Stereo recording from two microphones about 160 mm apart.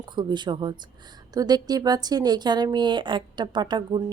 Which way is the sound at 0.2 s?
30° right (ahead or behind).